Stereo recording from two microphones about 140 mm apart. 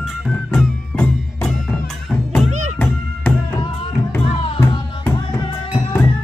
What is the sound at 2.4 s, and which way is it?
Music, 60° right (ahead or behind).